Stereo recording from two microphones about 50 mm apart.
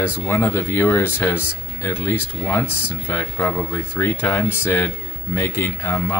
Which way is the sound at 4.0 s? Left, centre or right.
Left.